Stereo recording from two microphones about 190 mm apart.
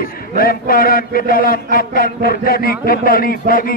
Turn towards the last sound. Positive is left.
turn(degrees=50)  # may be behind; listen again after turning